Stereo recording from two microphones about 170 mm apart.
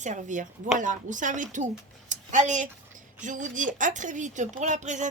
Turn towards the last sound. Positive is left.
turn(degrees=-45)  # may be behind; listen again after turning